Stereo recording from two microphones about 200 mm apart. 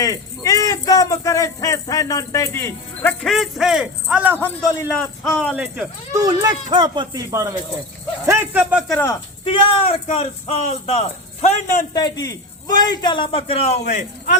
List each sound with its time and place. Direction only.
0.0 s speech: 20° left (ahead or behind); by 4.4 s 5° right (ahead or behind)
4.4 s speech: 15° left (ahead or behind)
5.2 s speech: centre (ahead or behind)
6.1 s speech: 15° right (ahead or behind)
9.4 s speech: 25° left (ahead or behind)
11.9 s a man's voice: 20° left (ahead or behind); by 14.3 s 40° left (ahead or behind)